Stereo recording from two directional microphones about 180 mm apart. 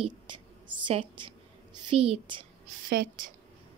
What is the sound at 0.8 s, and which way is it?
A woman's voice, 25° right (ahead or behind).